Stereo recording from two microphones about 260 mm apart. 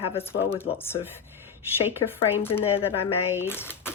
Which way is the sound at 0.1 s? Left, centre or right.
Centre.